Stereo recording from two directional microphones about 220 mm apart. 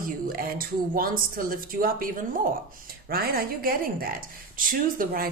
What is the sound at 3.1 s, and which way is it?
Speech, 40° right (ahead or behind).